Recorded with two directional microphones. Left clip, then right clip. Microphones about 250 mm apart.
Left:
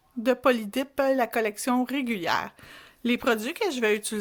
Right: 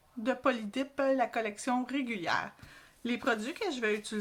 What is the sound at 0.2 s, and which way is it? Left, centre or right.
Speech, left.